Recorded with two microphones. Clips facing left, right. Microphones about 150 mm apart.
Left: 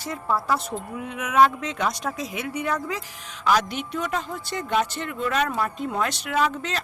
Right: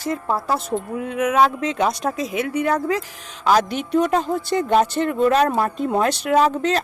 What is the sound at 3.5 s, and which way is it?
A woman's voice, 35° right (ahead or behind).